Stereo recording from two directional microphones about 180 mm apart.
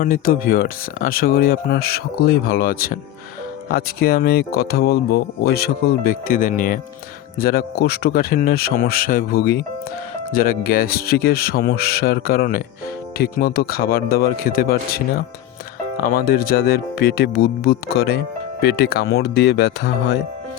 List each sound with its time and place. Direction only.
0.0 s speech: 50° left (ahead or behind)
16.0 s speech: 55° left (ahead or behind)